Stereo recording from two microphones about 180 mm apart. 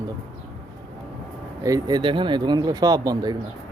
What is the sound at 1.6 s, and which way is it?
Speech, 20° right (ahead or behind).